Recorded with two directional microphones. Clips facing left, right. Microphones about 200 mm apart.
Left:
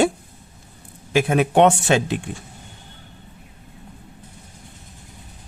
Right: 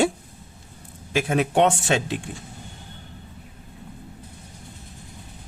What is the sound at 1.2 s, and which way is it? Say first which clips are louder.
Speech: left 4 dB; 60° left (ahead or behind).